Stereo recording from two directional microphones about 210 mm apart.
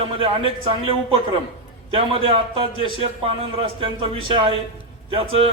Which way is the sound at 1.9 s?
25° right (ahead or behind).